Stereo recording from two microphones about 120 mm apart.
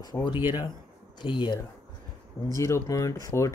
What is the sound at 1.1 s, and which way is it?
Speech, 40° left (ahead or behind).